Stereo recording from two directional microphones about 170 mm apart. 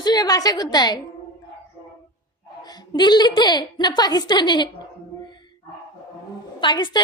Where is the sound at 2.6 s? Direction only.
25° left (ahead or behind).